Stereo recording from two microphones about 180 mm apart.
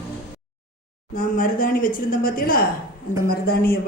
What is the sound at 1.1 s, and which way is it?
A woman's voice, 50° left (ahead or behind).